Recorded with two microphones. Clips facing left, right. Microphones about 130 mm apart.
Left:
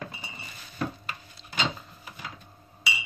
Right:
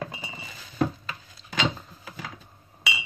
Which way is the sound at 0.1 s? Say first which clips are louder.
Right 3 dB; 90° right.